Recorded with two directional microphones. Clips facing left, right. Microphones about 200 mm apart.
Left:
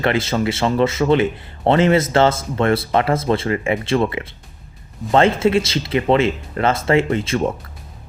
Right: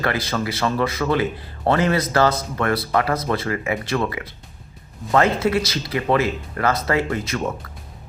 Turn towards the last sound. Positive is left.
turn(degrees=25)  # may be behind; listen again after turning